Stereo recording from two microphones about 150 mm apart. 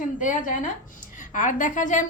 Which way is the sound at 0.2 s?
60° left (ahead or behind).